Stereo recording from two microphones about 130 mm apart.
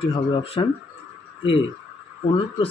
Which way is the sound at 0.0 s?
45° left (ahead or behind).